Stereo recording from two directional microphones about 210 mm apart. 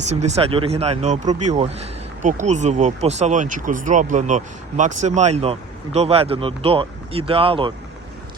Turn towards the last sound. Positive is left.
turn(degrees=-25)  # may be behind; listen again after turning